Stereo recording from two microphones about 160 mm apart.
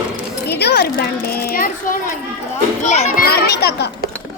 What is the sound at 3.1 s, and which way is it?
Speech, 75° left (ahead or behind).